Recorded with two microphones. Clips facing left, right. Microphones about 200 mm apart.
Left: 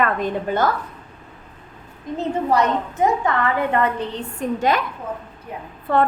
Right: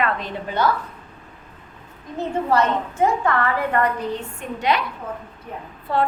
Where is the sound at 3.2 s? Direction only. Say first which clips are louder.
Left 1 dB; 20° left (ahead or behind).